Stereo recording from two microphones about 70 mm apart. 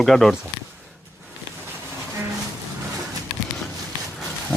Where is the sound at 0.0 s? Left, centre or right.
Centre.